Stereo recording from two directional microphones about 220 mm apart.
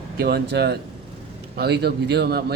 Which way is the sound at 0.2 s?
45° right (ahead or behind).